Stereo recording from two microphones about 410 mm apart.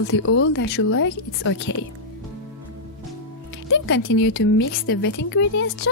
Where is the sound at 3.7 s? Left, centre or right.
Left.